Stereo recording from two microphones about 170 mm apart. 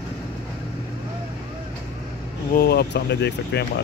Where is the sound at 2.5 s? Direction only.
65° left (ahead or behind); by 3.8 s 80° left.